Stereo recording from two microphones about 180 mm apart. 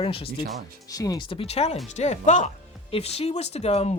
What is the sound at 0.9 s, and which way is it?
Speech, 20° left (ahead or behind).